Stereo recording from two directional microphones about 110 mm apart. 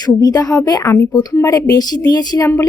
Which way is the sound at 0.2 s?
35° left (ahead or behind).